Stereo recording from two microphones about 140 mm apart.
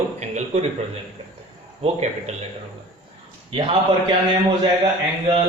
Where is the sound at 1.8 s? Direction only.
50° right (ahead or behind).